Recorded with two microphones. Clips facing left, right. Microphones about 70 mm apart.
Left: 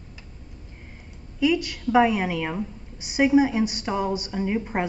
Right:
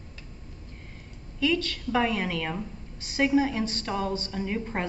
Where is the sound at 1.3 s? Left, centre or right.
Centre.